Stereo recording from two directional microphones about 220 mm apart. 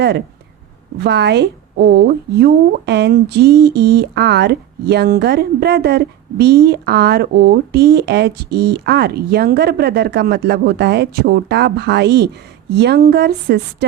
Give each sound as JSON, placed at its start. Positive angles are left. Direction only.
{"t": 0.9, "sound": "speech", "side_deg": -50}